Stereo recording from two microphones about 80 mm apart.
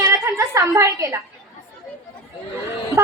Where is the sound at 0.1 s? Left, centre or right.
Right.